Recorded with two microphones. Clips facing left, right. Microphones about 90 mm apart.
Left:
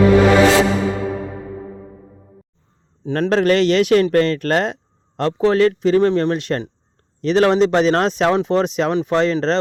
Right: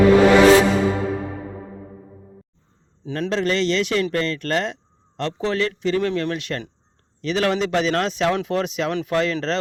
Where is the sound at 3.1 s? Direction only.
50° left (ahead or behind).